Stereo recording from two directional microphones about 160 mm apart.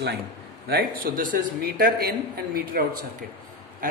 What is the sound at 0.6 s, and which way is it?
Speech, 65° right (ahead or behind).